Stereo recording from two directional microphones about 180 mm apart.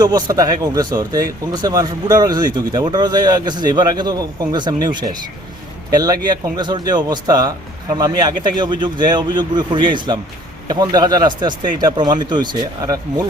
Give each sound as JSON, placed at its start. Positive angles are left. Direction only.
{"t": 0.0, "sound": "speech", "side_deg": -20}